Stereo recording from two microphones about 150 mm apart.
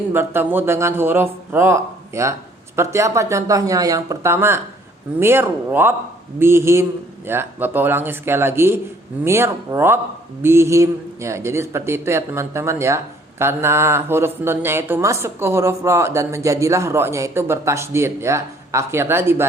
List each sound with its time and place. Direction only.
0.1 s a woman's voice: 15° right (ahead or behind)